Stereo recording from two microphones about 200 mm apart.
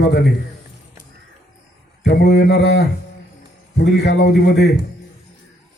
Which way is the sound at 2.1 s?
55° left (ahead or behind).